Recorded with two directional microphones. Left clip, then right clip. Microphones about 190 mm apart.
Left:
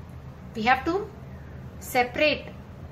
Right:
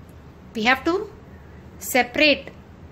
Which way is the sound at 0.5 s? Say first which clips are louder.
Right 3 dB; 50° right (ahead or behind).